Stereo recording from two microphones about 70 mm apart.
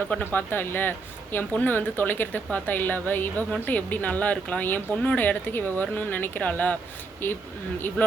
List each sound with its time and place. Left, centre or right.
0.3 s speech: left